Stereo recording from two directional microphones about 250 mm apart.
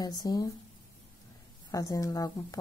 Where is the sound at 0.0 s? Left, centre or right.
Centre.